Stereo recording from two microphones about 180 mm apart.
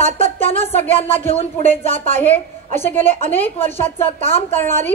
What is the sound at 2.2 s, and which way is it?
A woman's voice, 10° left (ahead or behind).